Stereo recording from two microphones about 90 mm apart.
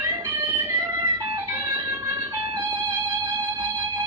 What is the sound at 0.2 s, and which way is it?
Music, 35° right (ahead or behind).